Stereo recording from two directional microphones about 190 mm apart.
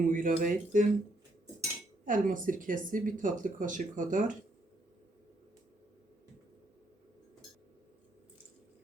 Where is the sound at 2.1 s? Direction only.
45° right (ahead or behind).